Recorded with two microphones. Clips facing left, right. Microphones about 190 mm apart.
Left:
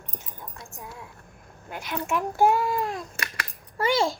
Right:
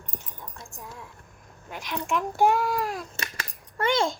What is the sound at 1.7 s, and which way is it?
Speech, 5° left (ahead or behind).